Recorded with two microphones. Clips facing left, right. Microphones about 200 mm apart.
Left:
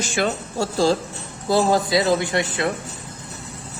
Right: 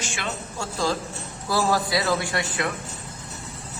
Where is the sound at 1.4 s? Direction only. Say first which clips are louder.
Left 5 dB; 25° left (ahead or behind).